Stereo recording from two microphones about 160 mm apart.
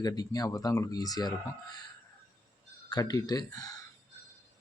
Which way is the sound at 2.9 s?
25° left (ahead or behind).